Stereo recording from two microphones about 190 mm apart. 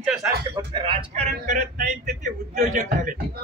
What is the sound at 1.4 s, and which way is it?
A man's voice, 45° right (ahead or behind).